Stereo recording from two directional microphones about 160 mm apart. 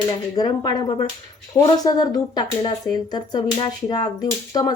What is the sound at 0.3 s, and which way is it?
A woman's voice, 25° left (ahead or behind).